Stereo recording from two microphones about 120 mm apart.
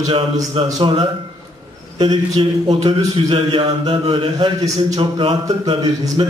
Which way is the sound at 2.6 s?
40° right (ahead or behind).